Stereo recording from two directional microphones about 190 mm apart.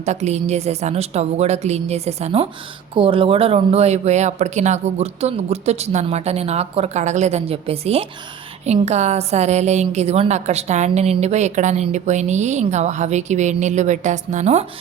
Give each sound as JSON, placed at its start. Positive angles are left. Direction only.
{"t": 0.0, "sound": "a woman's voice", "side_deg": -35}